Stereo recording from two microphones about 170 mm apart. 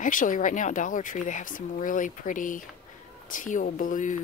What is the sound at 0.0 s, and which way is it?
Speech, 50° left (ahead or behind).